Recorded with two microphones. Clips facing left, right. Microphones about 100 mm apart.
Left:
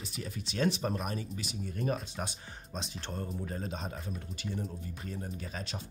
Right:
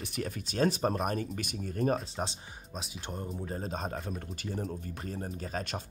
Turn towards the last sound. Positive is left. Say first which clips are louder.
# right 4 dB
turn(degrees=-45)  # may be behind; listen again after turning